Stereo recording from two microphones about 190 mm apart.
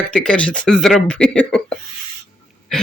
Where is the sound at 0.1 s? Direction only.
5° left (ahead or behind).